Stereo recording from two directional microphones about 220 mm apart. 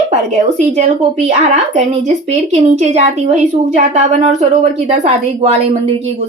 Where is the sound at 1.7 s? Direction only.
30° right (ahead or behind).